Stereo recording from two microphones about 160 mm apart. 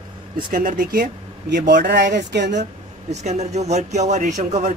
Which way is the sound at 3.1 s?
45° right (ahead or behind).